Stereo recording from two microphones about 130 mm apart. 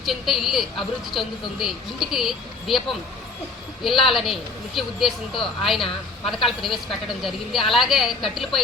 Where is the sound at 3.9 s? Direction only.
45° left (ahead or behind).